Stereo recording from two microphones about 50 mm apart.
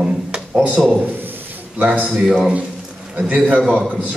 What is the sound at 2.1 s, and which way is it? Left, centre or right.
Speech, centre.